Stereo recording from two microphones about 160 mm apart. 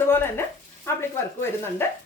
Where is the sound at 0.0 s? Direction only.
15° left (ahead or behind).